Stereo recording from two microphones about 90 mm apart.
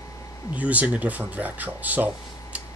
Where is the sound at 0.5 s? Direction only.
15° right (ahead or behind).